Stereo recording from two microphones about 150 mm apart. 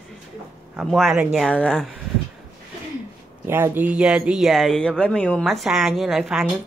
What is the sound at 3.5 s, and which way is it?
Speech, 15° right (ahead or behind).